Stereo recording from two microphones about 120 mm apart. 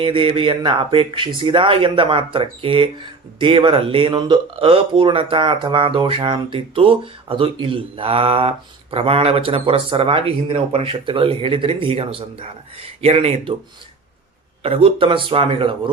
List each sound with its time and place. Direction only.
0.0 s speech: 50° right (ahead or behind)
14.6 s speech: 55° right (ahead or behind)